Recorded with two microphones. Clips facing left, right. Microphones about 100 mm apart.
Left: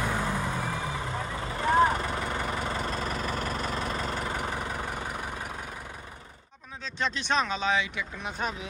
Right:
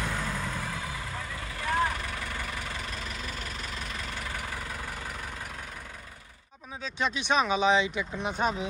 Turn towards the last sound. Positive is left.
turn(degrees=-10)  # may be behind; listen again after turning